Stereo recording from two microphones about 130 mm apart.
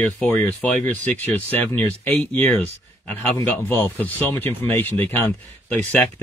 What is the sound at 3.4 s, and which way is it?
Speech, 15° left (ahead or behind).